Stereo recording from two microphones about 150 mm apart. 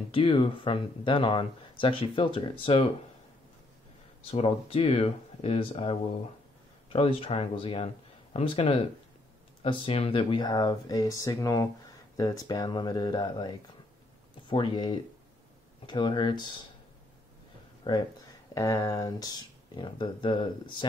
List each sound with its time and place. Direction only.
0.1 s speech: 35° left (ahead or behind)
4.3 s speech: 40° left (ahead or behind)
14.5 s speech: 30° left (ahead or behind)
17.9 s speech: 35° left (ahead or behind)
18.5 s speech: 20° left (ahead or behind)